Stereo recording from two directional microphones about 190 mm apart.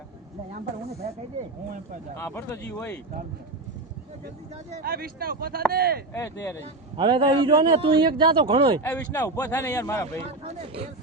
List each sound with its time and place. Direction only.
0.5 s speech: 40° right (ahead or behind)
2.1 s speech: 15° left (ahead or behind)
4.8 s speech: 50° right (ahead or behind)
6.9 s a man's voice: 25° right (ahead or behind)
8.8 s speech: 10° left (ahead or behind)
10.2 s speech: 30° right (ahead or behind)